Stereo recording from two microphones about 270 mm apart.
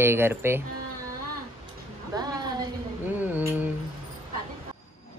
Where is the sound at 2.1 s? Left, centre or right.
Centre.